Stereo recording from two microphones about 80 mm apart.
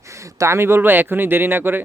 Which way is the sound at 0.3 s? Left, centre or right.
Right.